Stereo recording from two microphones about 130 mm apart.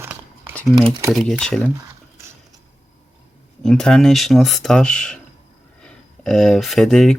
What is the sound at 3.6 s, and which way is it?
Speech, 5° left (ahead or behind).